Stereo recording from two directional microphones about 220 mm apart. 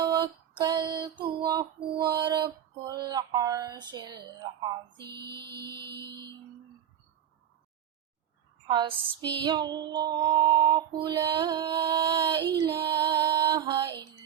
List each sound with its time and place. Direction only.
0.0 s music: 20° right (ahead or behind)
4.9 s music: 50° right (ahead or behind)
8.6 s music: 20° right (ahead or behind)
12.5 s female singing: 20° right (ahead or behind)